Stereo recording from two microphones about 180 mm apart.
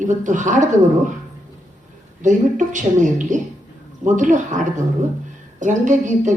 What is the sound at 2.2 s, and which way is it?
A woman's voice, 45° right (ahead or behind).